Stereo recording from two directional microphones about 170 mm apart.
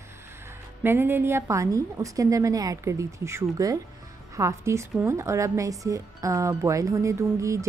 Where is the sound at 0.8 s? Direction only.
15° right (ahead or behind).